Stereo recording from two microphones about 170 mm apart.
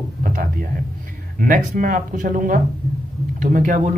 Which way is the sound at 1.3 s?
55° right (ahead or behind).